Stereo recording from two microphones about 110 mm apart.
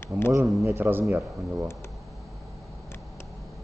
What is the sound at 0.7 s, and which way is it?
Speech, 20° right (ahead or behind).